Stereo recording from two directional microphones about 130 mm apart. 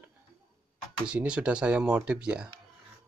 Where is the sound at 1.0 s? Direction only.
10° right (ahead or behind).